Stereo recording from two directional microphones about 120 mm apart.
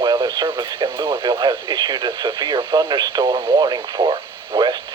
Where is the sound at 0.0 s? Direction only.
35° right (ahead or behind).